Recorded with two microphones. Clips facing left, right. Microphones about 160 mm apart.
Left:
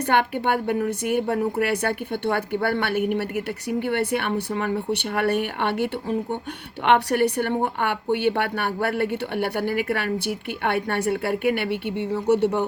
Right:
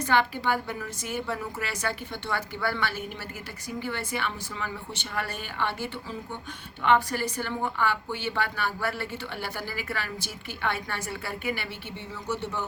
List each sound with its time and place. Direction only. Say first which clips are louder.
0.0 s speech: left 4 dB; 60° left (ahead or behind)